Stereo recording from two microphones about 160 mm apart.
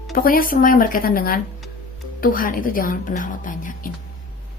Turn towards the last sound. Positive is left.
turn(degrees=55)  # may be behind; listen again after turning